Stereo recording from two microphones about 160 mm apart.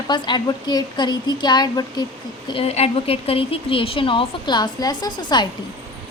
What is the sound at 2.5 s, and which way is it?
Speech, 40° left (ahead or behind).